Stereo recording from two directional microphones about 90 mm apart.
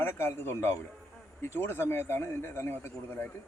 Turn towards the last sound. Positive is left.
turn(degrees=25)  # may be behind; listen again after turning